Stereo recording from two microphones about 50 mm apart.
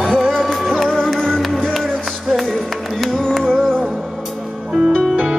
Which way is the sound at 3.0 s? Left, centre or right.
Centre.